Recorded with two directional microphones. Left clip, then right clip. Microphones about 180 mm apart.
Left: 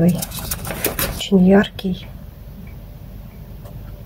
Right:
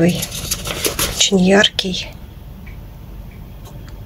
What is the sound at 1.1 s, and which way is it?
Speech, 10° left (ahead or behind).